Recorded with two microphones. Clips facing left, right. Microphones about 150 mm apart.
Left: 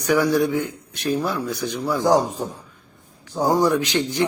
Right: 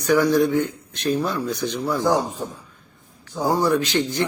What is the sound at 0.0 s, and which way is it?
A man's voice, 10° left (ahead or behind).